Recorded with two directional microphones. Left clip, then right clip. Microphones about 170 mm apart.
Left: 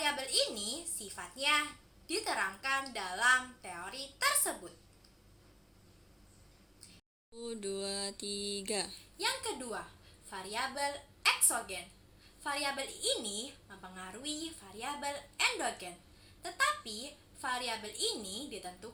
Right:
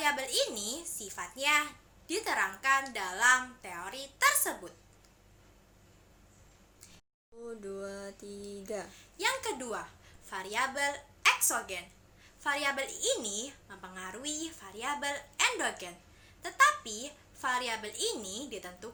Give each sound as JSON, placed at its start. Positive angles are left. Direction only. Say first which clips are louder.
{"t": 0.0, "sound": "a woman's voice", "louder": "right 2 dB", "side_deg": -5}
{"t": 7.4, "sound": "mantra", "louder": "left 2 dB", "side_deg": 40}
{"t": 9.1, "sound": "a woman's voice", "louder": "right 4 dB", "side_deg": -5}